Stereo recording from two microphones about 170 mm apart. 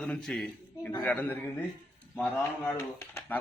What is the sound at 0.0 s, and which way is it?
A man's voice, 5° left (ahead or behind).